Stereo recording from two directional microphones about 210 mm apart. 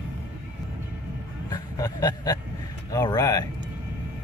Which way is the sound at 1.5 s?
20° left (ahead or behind).